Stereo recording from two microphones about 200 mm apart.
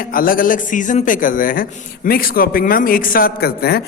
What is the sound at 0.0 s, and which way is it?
Speech, 45° left (ahead or behind).